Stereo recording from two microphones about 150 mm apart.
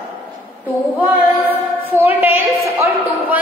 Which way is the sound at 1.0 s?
15° right (ahead or behind).